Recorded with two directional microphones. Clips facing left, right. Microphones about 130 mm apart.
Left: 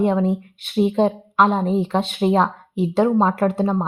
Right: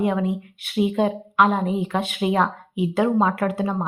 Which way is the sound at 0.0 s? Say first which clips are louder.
Left 4 dB; 30° left (ahead or behind).